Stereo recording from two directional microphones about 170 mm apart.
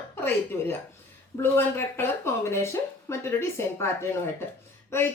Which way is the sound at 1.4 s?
15° left (ahead or behind).